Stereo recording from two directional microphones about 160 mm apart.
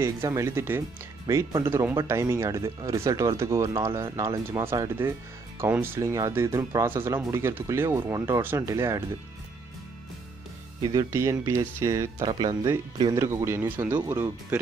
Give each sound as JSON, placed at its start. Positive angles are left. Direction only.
{"t": 0.0, "sound": "speech", "side_deg": -15}
{"t": 10.8, "sound": "speech", "side_deg": -25}